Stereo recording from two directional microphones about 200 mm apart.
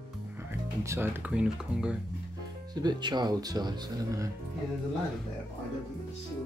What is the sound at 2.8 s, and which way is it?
Speech, 20° right (ahead or behind).